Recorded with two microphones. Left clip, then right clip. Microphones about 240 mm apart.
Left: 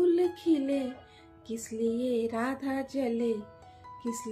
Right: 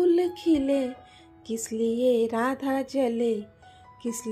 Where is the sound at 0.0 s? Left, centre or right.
Right.